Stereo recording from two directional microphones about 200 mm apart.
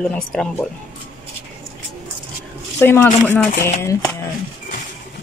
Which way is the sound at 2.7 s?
10° left (ahead or behind).